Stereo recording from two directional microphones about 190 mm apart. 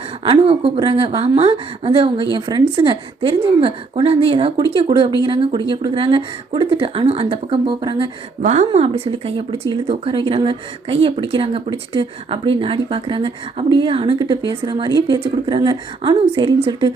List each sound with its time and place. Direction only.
0.3 s speech: 30° right (ahead or behind)
8.4 s speech: 35° right (ahead or behind)